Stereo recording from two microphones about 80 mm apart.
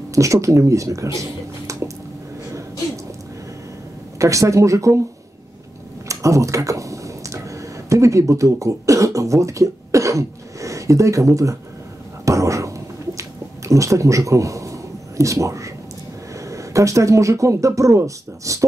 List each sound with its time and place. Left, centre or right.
0.1 s speech: right
4.2 s speech: right
6.0 s a sound: right
7.9 s speech: right
12.3 s a sound: right
16.3 s speech: right